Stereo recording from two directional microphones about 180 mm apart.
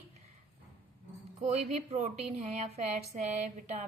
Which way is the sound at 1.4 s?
40° right (ahead or behind).